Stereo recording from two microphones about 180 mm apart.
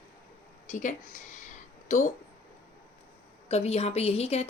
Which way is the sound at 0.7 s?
45° left (ahead or behind).